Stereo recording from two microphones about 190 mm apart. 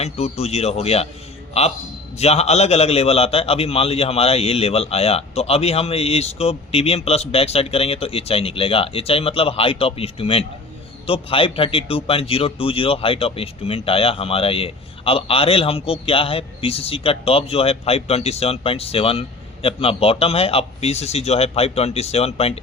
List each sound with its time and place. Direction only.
0.0 s a man's voice: 35° left (ahead or behind)